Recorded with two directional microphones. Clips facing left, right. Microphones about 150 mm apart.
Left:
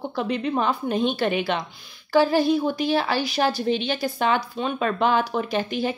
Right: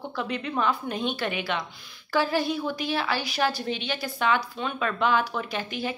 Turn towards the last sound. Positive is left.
turn(degrees=30)  # may be behind; listen again after turning